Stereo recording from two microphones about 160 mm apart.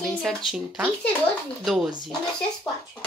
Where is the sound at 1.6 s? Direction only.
Centre (ahead or behind).